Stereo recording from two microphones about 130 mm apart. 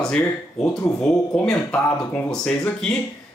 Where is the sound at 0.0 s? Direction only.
5° left (ahead or behind).